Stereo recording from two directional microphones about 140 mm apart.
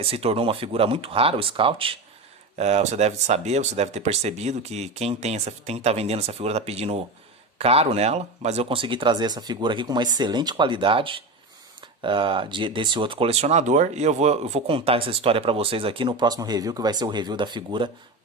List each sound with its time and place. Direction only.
0.0 s speech: 45° right (ahead or behind)
2.5 s speech: 55° right (ahead or behind); by 17.9 s 35° right (ahead or behind)